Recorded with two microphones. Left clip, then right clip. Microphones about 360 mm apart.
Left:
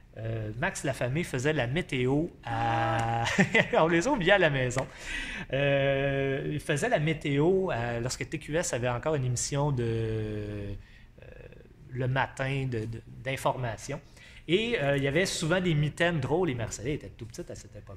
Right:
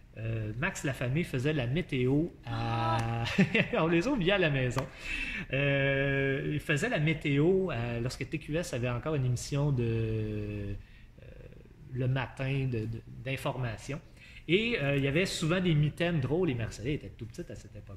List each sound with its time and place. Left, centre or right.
0.2 s speech: centre
12.0 s speech: centre